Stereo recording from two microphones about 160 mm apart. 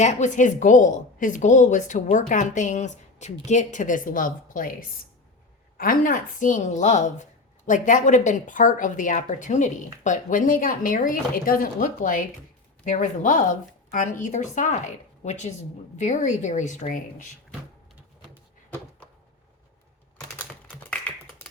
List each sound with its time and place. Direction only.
0.0 s speech: 45° left (ahead or behind)